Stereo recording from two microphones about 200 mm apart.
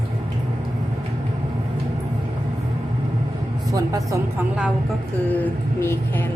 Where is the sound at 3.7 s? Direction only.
15° right (ahead or behind).